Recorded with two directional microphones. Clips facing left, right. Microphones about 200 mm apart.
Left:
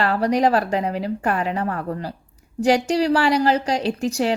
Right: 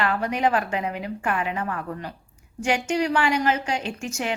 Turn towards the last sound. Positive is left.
turn(degrees=35)  # may be behind; listen again after turning